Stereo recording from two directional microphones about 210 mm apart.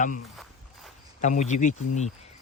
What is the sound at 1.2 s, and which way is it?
Speech, 35° left (ahead or behind).